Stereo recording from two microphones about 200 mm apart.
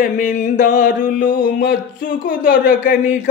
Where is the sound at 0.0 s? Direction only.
40° left (ahead or behind).